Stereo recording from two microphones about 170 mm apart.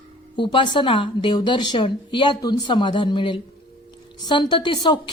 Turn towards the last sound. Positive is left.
turn(degrees=25)  # may be behind; listen again after turning